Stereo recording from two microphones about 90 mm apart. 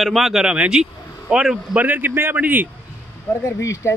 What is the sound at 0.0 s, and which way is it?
Speech, centre (ahead or behind).